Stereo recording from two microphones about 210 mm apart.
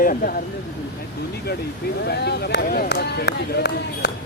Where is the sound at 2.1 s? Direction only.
50° left (ahead or behind).